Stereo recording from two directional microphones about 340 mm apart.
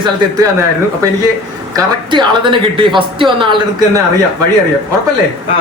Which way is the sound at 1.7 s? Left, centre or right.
Centre.